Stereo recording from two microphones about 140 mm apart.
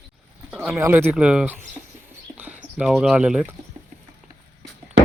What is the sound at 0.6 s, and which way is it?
Speech, 15° right (ahead or behind).